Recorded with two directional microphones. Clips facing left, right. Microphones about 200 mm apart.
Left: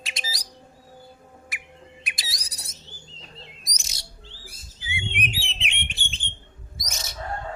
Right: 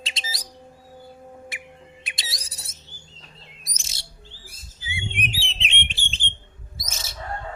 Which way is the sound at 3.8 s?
25° right (ahead or behind).